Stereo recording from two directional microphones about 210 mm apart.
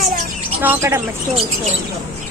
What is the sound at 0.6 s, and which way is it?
Speech, 10° right (ahead or behind).